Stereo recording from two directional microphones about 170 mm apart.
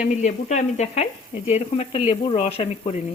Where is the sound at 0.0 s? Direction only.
45° left (ahead or behind).